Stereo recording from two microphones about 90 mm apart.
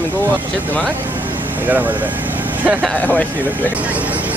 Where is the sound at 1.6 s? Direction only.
20° right (ahead or behind).